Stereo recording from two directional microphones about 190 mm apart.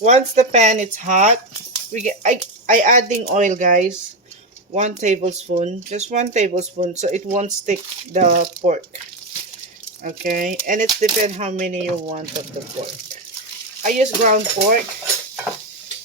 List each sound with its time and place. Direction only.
0.0 s speech: 35° right (ahead or behind)
10.0 s speech: 45° right (ahead or behind)
13.8 s speech: 40° right (ahead or behind)